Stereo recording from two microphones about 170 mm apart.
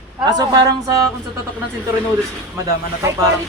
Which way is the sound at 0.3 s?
25° right (ahead or behind).